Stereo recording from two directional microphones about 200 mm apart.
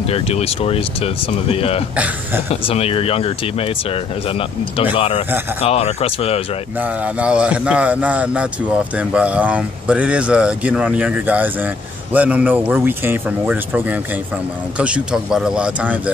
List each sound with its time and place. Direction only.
0.0 s speech: 30° left (ahead or behind)
6.8 s speech: 5° right (ahead or behind)